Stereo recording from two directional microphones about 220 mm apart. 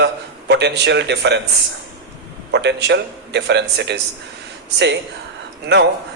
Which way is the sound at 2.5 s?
50° right (ahead or behind).